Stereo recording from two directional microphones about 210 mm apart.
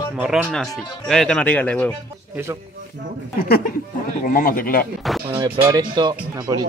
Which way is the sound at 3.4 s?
45° left (ahead or behind).